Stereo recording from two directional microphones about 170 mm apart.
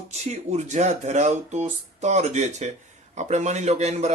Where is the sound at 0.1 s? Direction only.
40° right (ahead or behind).